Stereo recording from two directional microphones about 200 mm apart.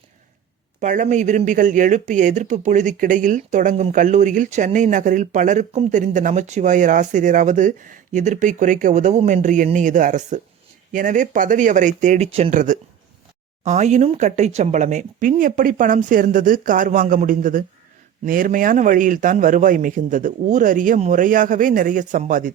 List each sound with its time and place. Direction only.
0.8 s speech: 40° right (ahead or behind)